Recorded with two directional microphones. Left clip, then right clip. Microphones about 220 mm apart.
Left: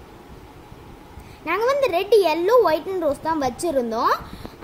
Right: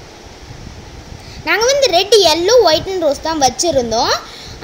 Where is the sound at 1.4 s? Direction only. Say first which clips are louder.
Right 7 dB; 5° left (ahead or behind).